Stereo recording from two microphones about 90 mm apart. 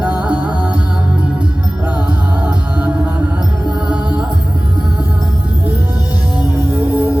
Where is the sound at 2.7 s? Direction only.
15° right (ahead or behind).